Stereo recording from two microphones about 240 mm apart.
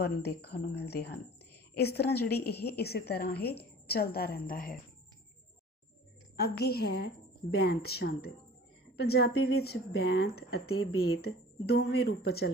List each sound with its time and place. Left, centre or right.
0.0 s a woman's voice: left
6.3 s a woman's voice: left
10.7 s speech: left
11.2 s a woman's voice: left